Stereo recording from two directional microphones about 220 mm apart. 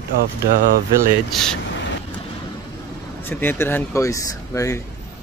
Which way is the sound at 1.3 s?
Centre (ahead or behind).